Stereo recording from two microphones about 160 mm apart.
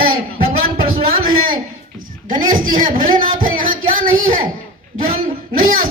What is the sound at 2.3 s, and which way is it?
Speech, 60° right (ahead or behind).